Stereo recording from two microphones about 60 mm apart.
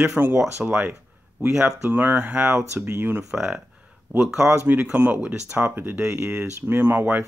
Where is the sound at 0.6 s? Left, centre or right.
Centre.